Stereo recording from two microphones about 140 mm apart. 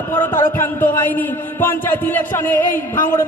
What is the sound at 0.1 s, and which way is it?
A man's voice, 15° left (ahead or behind).